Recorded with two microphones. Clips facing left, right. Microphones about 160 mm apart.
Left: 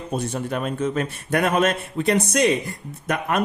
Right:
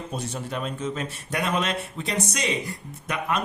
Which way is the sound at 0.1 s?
55° left (ahead or behind).